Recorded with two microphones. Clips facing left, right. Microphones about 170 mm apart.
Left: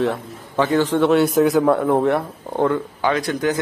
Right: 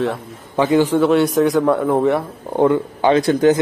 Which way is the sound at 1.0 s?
Centre (ahead or behind).